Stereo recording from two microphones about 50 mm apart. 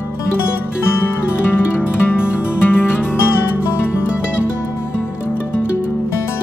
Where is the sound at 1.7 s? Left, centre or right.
Left.